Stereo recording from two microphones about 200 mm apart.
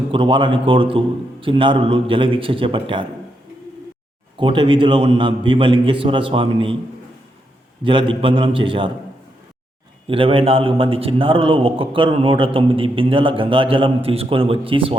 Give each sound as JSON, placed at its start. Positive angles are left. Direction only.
{"t": 0.1, "sound": "a man's voice", "side_deg": -25}
{"t": 4.4, "sound": "a man's voice", "side_deg": -25}
{"t": 7.9, "sound": "a man's voice", "side_deg": -25}
{"t": 10.1, "sound": "a man's voice", "side_deg": -25}